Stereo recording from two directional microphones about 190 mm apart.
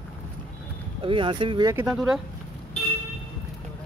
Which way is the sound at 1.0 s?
25° right (ahead or behind).